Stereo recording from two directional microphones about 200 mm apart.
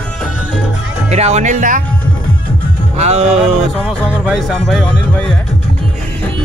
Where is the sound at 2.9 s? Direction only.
35° right (ahead or behind).